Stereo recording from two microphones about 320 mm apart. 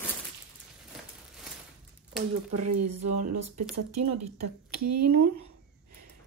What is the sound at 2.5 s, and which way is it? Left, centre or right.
Speech, right.